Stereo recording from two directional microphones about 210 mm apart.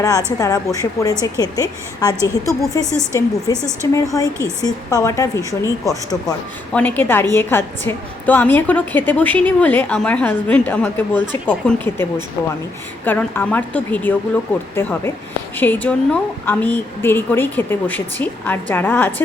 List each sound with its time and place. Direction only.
0.3 s a woman's voice: 15° left (ahead or behind)
13.1 s a woman's voice: 10° left (ahead or behind)